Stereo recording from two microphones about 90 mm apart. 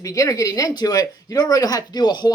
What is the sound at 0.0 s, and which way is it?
Speech, 40° left (ahead or behind).